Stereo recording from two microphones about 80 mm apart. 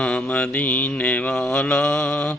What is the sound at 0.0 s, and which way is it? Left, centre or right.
Mantra, centre.